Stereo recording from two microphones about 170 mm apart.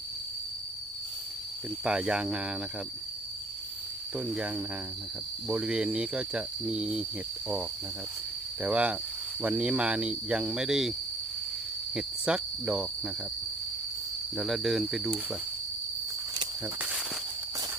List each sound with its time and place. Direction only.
1.8 s speech: 5° right (ahead or behind)
4.2 s speech: 5° right (ahead or behind)
8.6 s speech: 10° right (ahead or behind)
11.9 s cricket: 5° right (ahead or behind)
14.3 s speech: centre (ahead or behind)
16.3 s cricket: 25° right (ahead or behind)